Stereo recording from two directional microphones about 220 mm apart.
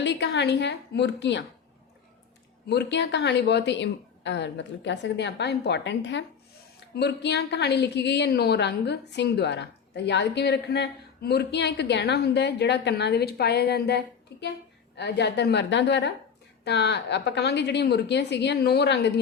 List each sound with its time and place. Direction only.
0.0 s a woman's voice: 55° left (ahead or behind)
2.6 s a woman's voice: 50° left (ahead or behind)